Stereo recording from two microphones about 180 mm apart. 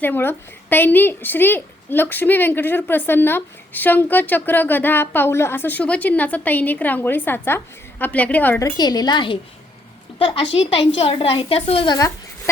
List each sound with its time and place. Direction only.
0.0 s a woman's voice: 10° left (ahead or behind); by 11.9 s 30° left (ahead or behind)